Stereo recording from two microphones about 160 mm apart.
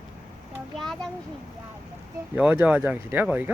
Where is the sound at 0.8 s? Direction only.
5° left (ahead or behind).